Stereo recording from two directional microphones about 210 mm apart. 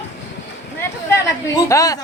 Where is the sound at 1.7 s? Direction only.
15° left (ahead or behind).